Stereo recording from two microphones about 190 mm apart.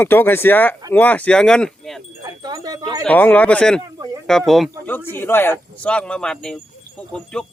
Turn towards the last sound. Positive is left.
turn(degrees=5)  # may be behind; listen again after turning